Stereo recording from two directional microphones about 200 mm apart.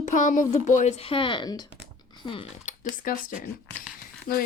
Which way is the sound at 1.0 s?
25° left (ahead or behind).